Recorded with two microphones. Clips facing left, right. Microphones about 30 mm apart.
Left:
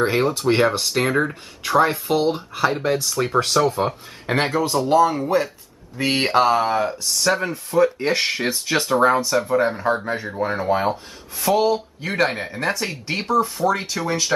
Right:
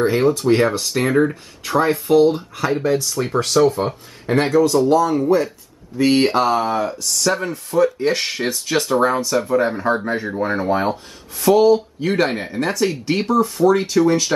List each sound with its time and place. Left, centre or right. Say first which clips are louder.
0.3 s speech: right 2 dB; centre
4.3 s speech: right 5 dB; left; by 14.3 s centre